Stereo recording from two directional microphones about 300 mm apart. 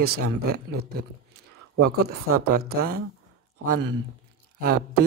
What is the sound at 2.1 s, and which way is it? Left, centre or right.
Speech, right.